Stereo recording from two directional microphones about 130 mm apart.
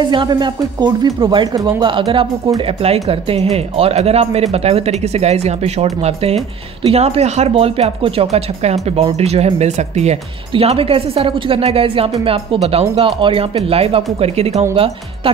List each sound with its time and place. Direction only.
0.0 s speech: 35° right (ahead or behind); by 10.1 s 60° right (ahead or behind)
10.5 s speech: 45° right (ahead or behind)